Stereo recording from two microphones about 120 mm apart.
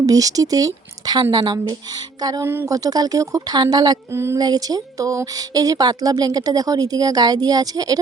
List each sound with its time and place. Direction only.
0.0 s speech: 30° right (ahead or behind)
2.4 s speech: 20° right (ahead or behind)
2.7 s speech: 30° right (ahead or behind)
4.1 s speech: 20° right (ahead or behind)
4.4 s speech: 35° right (ahead or behind)